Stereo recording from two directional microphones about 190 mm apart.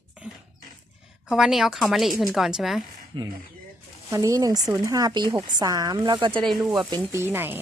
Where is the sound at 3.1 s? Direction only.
25° right (ahead or behind).